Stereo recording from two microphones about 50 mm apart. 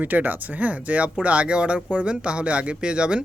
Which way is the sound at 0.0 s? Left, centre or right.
Right.